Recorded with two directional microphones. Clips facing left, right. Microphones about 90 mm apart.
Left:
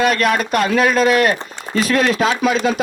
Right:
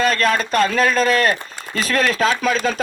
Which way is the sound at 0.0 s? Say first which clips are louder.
Left 2 dB; 35° right (ahead or behind).